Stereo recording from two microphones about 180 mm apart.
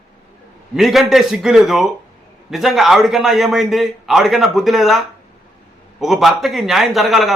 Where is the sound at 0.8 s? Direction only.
Centre (ahead or behind).